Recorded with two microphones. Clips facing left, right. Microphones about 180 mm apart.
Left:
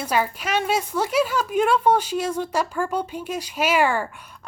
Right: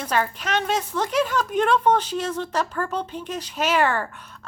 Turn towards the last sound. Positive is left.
turn(degrees=10)  # may be behind; listen again after turning